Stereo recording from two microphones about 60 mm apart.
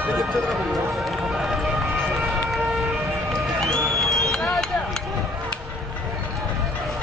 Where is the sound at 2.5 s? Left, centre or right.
Centre.